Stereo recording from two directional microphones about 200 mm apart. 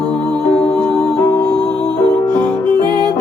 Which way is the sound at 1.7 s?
20° right (ahead or behind).